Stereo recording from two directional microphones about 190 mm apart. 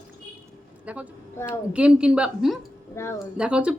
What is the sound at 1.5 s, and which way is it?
A woman's voice, 5° right (ahead or behind).